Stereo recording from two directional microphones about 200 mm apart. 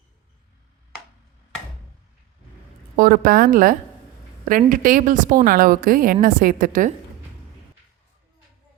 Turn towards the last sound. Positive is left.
turn(degrees=-45)  # may be behind; listen again after turning